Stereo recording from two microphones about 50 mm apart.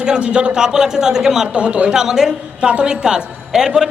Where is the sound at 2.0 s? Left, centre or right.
Centre.